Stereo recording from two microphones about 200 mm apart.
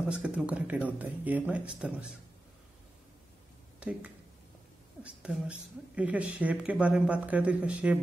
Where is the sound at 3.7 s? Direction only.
5° right (ahead or behind).